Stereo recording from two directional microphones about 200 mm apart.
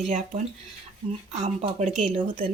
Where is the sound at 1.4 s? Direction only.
35° right (ahead or behind).